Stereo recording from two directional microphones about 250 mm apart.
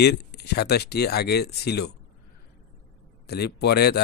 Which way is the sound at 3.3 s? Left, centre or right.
Left.